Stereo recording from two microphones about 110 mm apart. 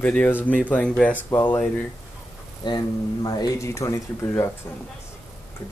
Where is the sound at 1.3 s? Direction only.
20° left (ahead or behind).